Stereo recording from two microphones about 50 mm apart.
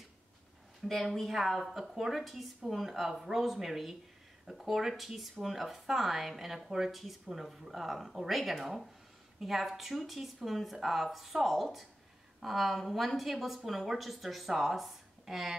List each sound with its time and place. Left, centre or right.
0.8 s a woman's voice: centre